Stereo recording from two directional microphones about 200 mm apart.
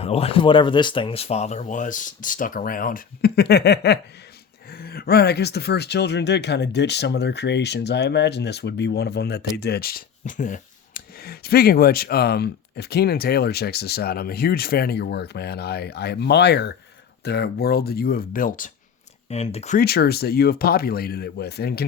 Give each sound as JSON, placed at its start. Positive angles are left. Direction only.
{"t": 0.0, "sound": "speech", "side_deg": 30}
{"t": 19.3, "sound": "speech", "side_deg": 30}
{"t": 19.8, "sound": "speech", "side_deg": 50}